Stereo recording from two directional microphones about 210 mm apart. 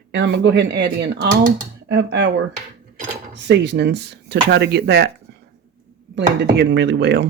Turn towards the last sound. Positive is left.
turn(degrees=-55)  # may be behind; listen again after turning